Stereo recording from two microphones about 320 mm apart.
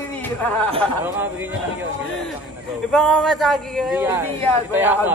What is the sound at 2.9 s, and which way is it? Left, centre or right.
Speech, centre.